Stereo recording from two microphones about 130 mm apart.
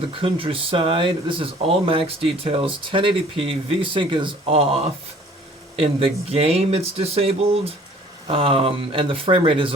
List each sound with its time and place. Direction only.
0.2 s speech: 45° right (ahead or behind)
5.8 s speech: 50° right (ahead or behind)